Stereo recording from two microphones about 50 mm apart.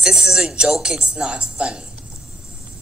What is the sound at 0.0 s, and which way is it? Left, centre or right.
A woman's voice, centre.